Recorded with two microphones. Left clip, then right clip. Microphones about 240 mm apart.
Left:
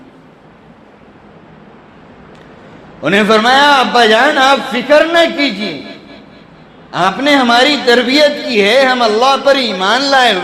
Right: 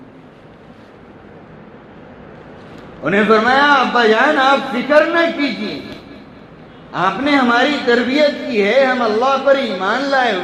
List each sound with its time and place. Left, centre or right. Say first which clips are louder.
3.0 s a man's voice: left 3 dB; left
6.9 s a man's voice: left 4 dB; left